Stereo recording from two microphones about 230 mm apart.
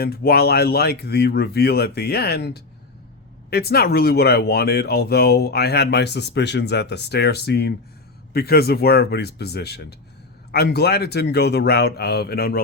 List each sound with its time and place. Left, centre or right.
0.0 s speech: left